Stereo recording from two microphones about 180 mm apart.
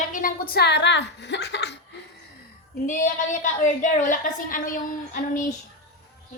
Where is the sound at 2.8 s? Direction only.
45° left (ahead or behind).